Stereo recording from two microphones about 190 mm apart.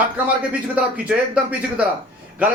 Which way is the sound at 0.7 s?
5° right (ahead or behind).